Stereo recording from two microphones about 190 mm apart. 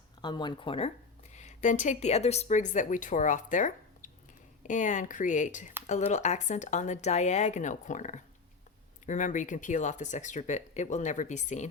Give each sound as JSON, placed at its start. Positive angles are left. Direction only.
{"t": 0.2, "sound": "speech", "side_deg": 25}